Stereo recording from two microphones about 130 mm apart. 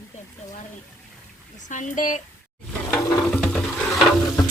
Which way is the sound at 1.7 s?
80° left.